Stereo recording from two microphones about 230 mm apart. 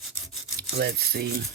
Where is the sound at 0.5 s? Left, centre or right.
Right.